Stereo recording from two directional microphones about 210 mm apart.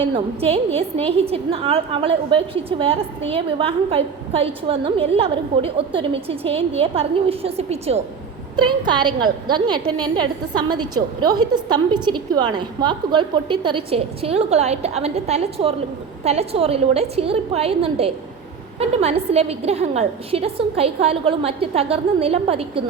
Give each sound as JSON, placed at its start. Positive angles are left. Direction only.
{"t": 0.0, "sound": "a woman's voice", "side_deg": -25}